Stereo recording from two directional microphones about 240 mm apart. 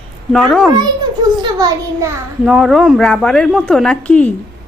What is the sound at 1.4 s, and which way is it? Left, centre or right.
Speech, centre.